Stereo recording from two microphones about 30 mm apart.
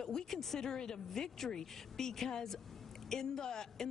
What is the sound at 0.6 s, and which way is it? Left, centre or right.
Speech, left.